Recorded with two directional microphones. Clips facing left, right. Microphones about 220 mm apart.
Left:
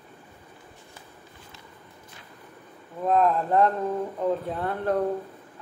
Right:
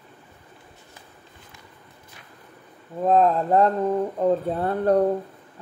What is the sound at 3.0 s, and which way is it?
Speech, 30° right (ahead or behind).